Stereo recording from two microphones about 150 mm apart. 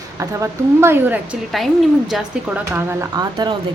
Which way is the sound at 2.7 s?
20° right (ahead or behind).